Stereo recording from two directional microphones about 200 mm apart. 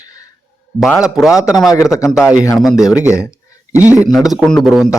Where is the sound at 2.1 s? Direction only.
5° right (ahead or behind).